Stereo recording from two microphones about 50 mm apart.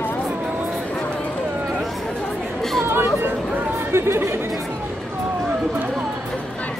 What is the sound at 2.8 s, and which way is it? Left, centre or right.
Chatter, right.